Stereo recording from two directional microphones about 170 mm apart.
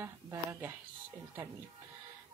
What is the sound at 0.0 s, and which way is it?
Speech, 15° right (ahead or behind).